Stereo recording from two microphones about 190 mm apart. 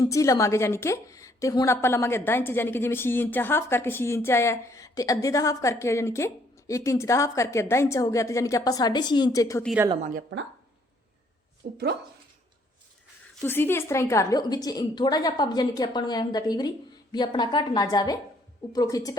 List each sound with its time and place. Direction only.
0.0 s a woman's voice: 15° left (ahead or behind)
10.0 s a woman's voice: 45° right (ahead or behind)
11.6 s a woman's voice: 50° right (ahead or behind)
13.4 s a woman's voice: 10° left (ahead or behind)